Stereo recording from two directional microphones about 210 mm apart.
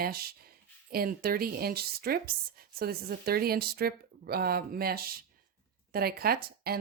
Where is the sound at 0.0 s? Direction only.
45° right (ahead or behind).